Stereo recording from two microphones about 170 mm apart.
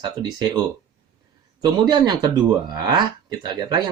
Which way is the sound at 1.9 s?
25° right (ahead or behind).